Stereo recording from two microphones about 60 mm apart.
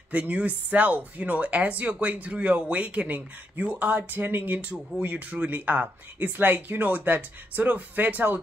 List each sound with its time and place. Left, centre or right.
0.1 s speech: right